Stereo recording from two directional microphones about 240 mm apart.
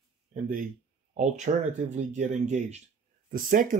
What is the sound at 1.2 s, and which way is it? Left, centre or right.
Speech, right.